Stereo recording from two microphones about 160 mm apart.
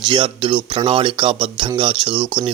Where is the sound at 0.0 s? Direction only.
30° right (ahead or behind).